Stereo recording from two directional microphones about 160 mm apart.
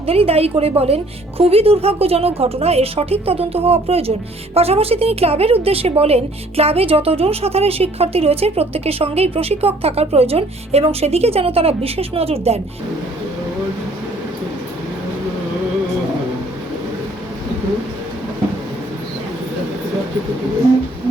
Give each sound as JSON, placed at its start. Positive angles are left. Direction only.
{"t": 0.0, "sound": "a woman's voice", "side_deg": -40}